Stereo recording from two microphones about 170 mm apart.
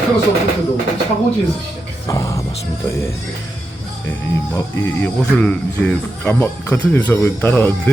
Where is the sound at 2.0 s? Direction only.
20° left (ahead or behind).